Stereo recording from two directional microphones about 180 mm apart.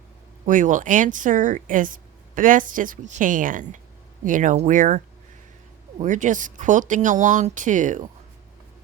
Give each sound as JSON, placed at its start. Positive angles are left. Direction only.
{"t": 0.4, "sound": "speech", "side_deg": -45}